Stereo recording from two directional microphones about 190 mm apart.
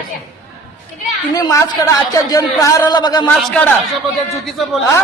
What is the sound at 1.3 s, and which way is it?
A man's voice, 20° left (ahead or behind).